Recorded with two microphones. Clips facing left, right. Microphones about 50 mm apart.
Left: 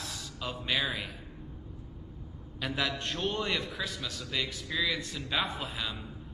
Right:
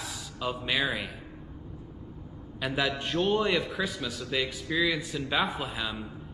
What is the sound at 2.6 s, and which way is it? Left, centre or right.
A man's voice, centre.